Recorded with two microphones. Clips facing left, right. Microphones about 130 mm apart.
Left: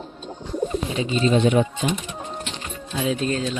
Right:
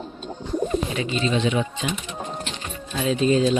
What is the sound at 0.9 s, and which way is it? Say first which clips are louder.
Speech: left 3 dB; 35° left (ahead or behind).